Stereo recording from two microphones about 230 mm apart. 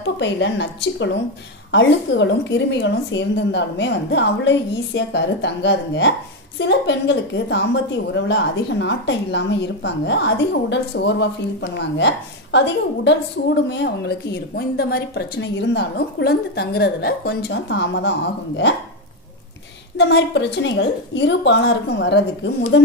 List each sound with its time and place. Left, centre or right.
0.0 s a woman's voice: left
20.0 s a woman's voice: left